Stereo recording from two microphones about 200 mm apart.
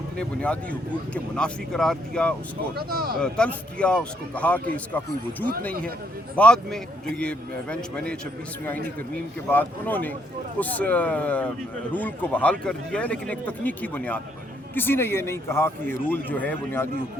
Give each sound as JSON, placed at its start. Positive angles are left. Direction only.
{"t": 0.2, "sound": "speech", "side_deg": 5}
{"t": 2.7, "sound": "speech", "side_deg": -50}
{"t": 3.2, "sound": "speech", "side_deg": 5}
{"t": 6.3, "sound": "speech", "side_deg": 5}